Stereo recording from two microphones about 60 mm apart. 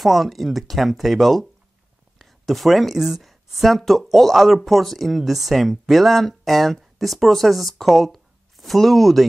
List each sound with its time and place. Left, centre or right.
0.0 s speech: centre